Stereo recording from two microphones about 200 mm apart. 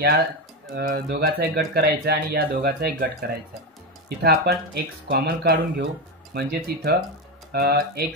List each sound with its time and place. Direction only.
0.7 s speech: 50° right (ahead or behind)